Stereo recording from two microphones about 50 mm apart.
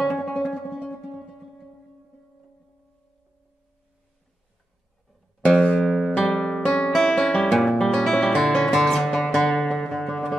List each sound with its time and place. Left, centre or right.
0.0 s music: centre
0.7 s music: centre
5.5 s music: centre
5.8 s music: centre